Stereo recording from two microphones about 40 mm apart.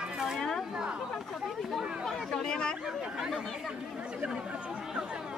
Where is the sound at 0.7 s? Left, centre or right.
Centre.